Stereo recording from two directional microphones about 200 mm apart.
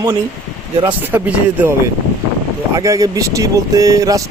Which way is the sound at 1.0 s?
10° right (ahead or behind).